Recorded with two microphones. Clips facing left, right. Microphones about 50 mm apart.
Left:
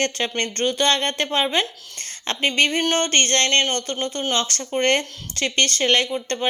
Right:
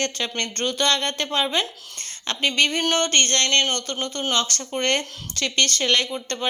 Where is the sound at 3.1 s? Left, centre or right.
Left.